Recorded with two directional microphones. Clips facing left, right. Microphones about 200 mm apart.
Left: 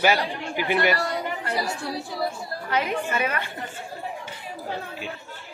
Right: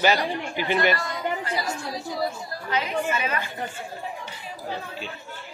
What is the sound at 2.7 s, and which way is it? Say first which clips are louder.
Speech: even; 55° left (ahead or behind).